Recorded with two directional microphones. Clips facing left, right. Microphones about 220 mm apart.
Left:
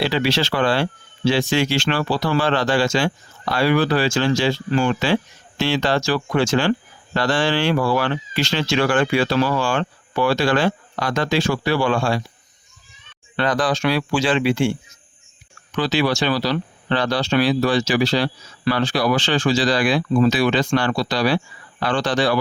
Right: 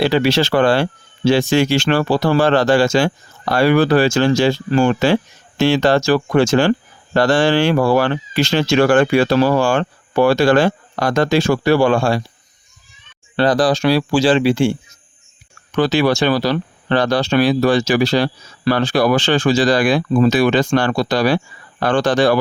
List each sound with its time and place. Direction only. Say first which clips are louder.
0.0 s speech: right 5 dB; 45° right (ahead or behind)
13.3 s speech: right 6 dB; 35° right (ahead or behind)
15.7 s speech: right 5 dB; 50° right (ahead or behind)